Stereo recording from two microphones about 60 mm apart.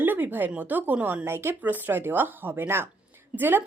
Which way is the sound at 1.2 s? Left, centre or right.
Right.